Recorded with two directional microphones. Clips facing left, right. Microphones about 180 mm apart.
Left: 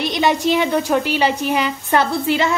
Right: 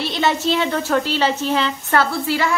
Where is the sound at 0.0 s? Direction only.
15° left (ahead or behind).